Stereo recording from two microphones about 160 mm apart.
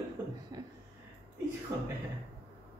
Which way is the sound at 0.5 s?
25° right (ahead or behind).